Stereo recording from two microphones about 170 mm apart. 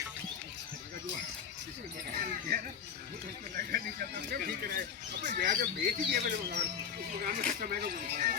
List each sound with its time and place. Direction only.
3.6 s speech: 60° right (ahead or behind)